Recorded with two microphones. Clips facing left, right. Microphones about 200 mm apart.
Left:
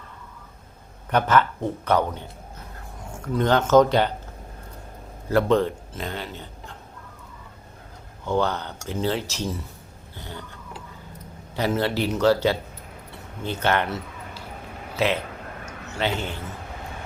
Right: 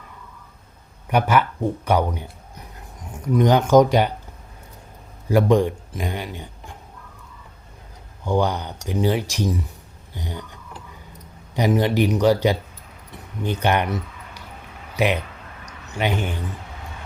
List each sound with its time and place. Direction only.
1.1 s speech: 10° right (ahead or behind)
5.3 s a man's voice: 15° right (ahead or behind)
8.2 s speech: 15° right (ahead or behind)
13.1 s a sound: 15° right (ahead or behind)
14.9 s speech: 15° right (ahead or behind)